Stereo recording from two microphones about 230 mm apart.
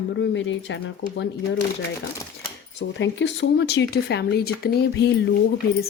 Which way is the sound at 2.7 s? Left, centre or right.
Left.